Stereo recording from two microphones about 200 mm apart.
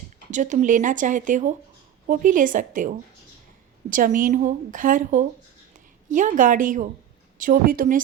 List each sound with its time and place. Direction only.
0.3 s a woman's voice: 40° right (ahead or behind)